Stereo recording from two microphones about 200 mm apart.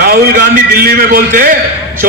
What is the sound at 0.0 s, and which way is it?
A man's voice, 50° right (ahead or behind).